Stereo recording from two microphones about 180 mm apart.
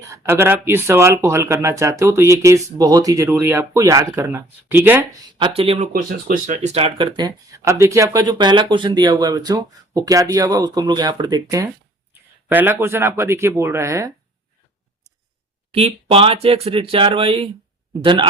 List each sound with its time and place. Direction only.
0.0 s speech: 15° right (ahead or behind)
5.4 s speech: 30° right (ahead or behind)
5.9 s speech: 50° right (ahead or behind); by 14.1 s 15° right (ahead or behind)
15.7 s speech: 35° right (ahead or behind)